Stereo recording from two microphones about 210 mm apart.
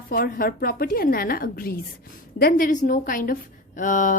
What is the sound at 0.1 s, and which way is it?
A woman's voice, 45° left (ahead or behind).